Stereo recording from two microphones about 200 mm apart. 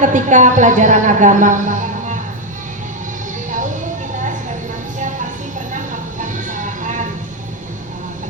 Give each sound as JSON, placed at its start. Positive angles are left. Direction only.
{"t": 0.0, "sound": "a woman's voice", "side_deg": -40}
{"t": 5.7, "sound": "vehicle", "side_deg": -40}